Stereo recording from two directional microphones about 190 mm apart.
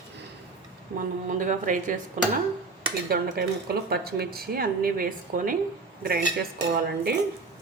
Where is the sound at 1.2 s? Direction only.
45° right (ahead or behind).